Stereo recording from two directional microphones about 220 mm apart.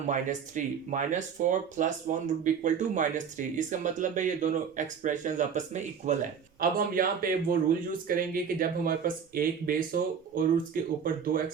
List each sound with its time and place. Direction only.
0.1 s speech: 35° right (ahead or behind)